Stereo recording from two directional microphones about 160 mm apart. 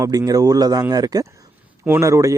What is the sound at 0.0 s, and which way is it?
Speech, 25° right (ahead or behind).